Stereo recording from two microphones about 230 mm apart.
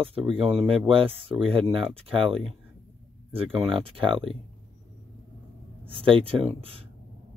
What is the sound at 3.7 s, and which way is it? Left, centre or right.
Speech, right.